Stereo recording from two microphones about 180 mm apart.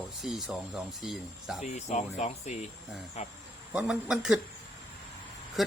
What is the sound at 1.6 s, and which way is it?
Speech, 40° left (ahead or behind).